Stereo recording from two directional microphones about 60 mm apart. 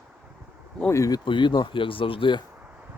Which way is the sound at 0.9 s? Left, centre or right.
Left.